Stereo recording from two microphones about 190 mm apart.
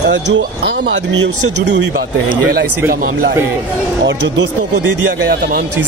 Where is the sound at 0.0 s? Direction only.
60° right (ahead or behind).